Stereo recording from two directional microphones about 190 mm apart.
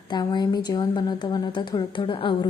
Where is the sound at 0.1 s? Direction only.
20° left (ahead or behind).